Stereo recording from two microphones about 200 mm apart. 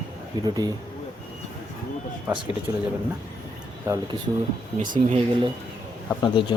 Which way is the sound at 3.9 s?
10° right (ahead or behind).